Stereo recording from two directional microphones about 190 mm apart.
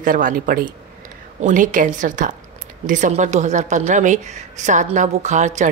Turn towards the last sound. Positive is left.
turn(degrees=-40)  # may be behind; listen again after turning